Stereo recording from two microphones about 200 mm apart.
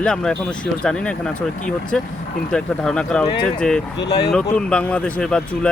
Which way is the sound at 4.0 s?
55° left (ahead or behind).